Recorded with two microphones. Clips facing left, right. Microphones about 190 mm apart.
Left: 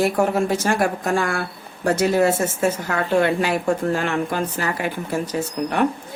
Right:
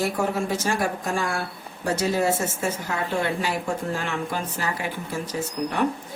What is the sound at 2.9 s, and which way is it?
A woman's voice, 65° left (ahead or behind).